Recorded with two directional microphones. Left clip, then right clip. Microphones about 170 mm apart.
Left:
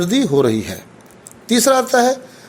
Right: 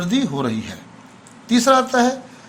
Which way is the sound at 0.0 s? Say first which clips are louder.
Left 7 dB; 40° left (ahead or behind).